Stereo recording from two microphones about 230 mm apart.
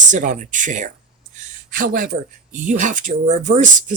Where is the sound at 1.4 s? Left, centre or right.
Right.